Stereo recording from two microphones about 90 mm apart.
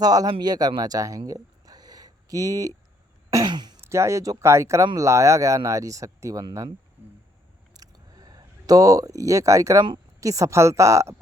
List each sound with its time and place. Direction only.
0.0 s speech: 45° right (ahead or behind)
1.3 s a sound: 45° right (ahead or behind)
3.4 s speech: 55° right (ahead or behind)
3.8 s speech: 30° right (ahead or behind)
7.8 s a sound: 45° right (ahead or behind)
10.2 s speech: 35° right (ahead or behind)